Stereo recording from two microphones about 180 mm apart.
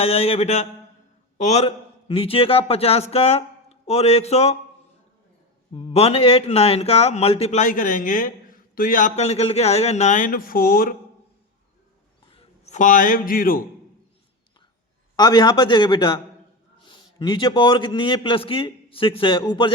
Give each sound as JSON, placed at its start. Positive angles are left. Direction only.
{"t": 0.0, "sound": "a man's voice", "side_deg": 35}
{"t": 5.7, "sound": "speech", "side_deg": 35}
{"t": 12.3, "sound": "a man's voice", "side_deg": 35}
{"t": 15.1, "sound": "a man's voice", "side_deg": 25}